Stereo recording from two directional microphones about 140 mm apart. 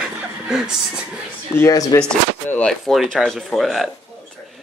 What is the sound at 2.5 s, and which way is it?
Speech, 10° left (ahead or behind).